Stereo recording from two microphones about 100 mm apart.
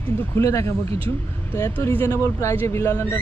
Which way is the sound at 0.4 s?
30° left (ahead or behind).